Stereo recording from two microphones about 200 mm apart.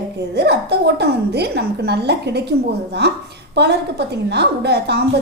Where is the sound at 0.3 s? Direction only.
55° right (ahead or behind).